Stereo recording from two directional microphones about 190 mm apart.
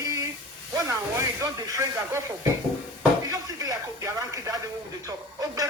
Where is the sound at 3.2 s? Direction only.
15° right (ahead or behind).